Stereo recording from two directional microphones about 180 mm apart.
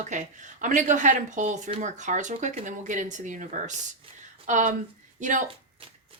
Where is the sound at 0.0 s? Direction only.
45° right (ahead or behind).